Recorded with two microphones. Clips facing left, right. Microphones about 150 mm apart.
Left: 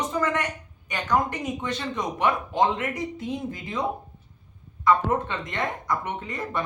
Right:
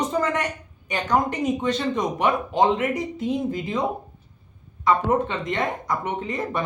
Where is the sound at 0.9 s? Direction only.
20° right (ahead or behind).